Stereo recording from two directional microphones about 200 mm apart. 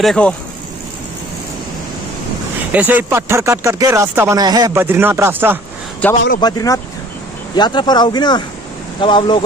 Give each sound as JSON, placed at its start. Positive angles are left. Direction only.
{"t": 0.0, "sound": "speech", "side_deg": 5}
{"t": 2.7, "sound": "speech", "side_deg": -10}
{"t": 6.0, "sound": "a man's voice", "side_deg": 5}
{"t": 6.4, "sound": "speech", "side_deg": 20}